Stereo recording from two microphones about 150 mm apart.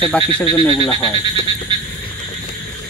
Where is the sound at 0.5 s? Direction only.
30° left (ahead or behind).